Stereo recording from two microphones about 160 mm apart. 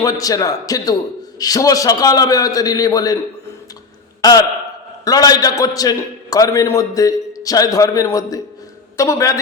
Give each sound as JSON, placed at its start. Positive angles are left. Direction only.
{"t": 0.0, "sound": "a man's voice", "side_deg": 20}
{"t": 4.2, "sound": "a man's voice", "side_deg": 25}